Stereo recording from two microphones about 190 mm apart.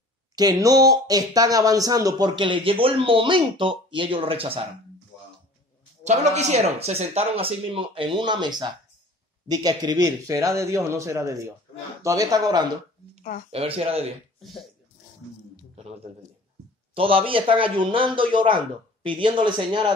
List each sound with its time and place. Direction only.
0.4 s speech: 20° right (ahead or behind)
6.0 s a man's voice: 35° right (ahead or behind)
14.4 s speech: centre (ahead or behind)
15.7 s a sound: 35° right (ahead or behind)
16.9 s speech: 30° right (ahead or behind)